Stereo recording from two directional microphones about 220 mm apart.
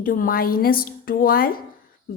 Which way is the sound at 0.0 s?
40° left (ahead or behind).